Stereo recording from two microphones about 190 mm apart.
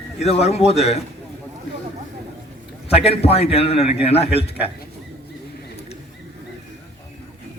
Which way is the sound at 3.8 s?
5° right (ahead or behind).